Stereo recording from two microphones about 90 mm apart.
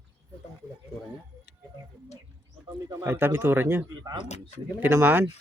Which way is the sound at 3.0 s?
25° right (ahead or behind).